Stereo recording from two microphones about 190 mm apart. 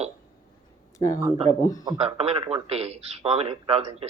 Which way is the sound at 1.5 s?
15° left (ahead or behind).